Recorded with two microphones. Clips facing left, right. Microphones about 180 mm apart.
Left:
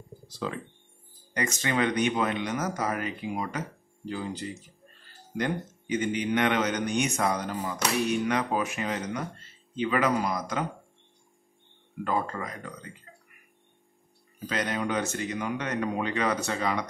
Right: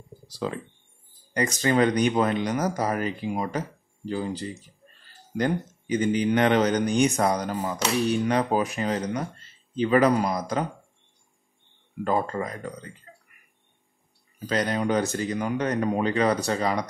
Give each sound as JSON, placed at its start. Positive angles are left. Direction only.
{"t": 0.3, "sound": "a man's voice", "side_deg": -35}
{"t": 12.0, "sound": "a man's voice", "side_deg": -35}
{"t": 14.4, "sound": "a man's voice", "side_deg": -35}